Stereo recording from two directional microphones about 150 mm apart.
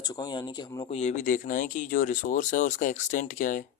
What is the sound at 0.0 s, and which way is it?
Speech, 25° left (ahead or behind).